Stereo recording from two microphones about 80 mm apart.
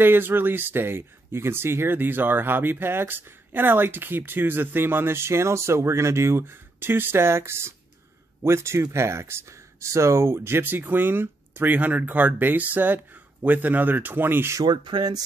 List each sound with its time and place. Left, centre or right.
0.0 s speech: right
14.6 s speech: right